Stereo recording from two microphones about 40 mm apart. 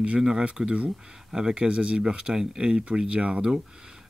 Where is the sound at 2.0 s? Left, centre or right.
Right.